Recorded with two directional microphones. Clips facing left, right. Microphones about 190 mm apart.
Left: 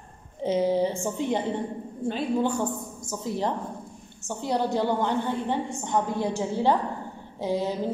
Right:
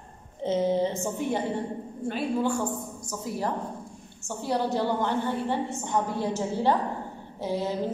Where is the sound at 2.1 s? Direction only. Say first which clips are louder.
Left 1 dB; 20° left (ahead or behind).